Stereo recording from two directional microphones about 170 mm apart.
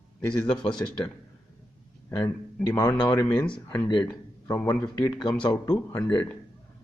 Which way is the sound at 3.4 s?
5° left (ahead or behind).